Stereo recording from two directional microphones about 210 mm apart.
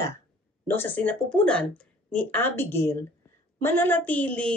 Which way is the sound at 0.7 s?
10° left (ahead or behind).